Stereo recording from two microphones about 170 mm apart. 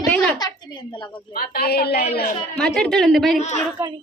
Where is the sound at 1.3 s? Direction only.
65° left (ahead or behind).